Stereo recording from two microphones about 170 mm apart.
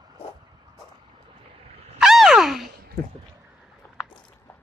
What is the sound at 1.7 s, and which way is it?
Wild animals, 35° right (ahead or behind).